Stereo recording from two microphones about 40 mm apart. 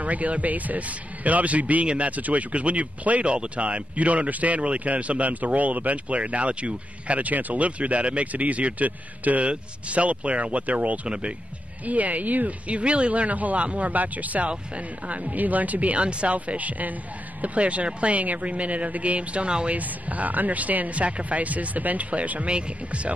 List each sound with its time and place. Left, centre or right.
0.0 s speech: right
19.8 s speech: right